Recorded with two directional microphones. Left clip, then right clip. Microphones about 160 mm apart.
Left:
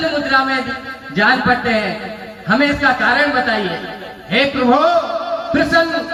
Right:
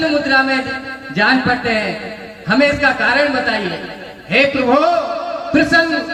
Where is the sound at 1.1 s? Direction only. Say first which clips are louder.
Left 1 dB; 50° right (ahead or behind).